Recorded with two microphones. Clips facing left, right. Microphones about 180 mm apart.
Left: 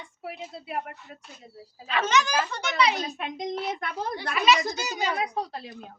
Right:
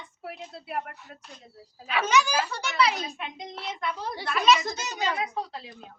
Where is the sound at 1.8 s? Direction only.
10° right (ahead or behind).